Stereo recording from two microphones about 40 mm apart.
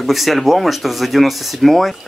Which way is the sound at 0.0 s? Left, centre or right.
Centre.